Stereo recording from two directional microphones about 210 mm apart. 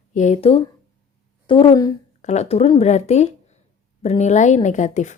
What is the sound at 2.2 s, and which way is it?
Speech, 35° left (ahead or behind).